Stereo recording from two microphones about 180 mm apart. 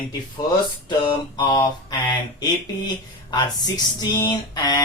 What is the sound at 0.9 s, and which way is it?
Speech, 25° left (ahead or behind).